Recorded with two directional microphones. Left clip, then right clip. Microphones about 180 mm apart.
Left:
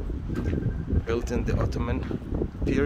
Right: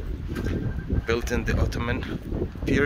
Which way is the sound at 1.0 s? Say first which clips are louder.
Right 3 dB; 5° left (ahead or behind).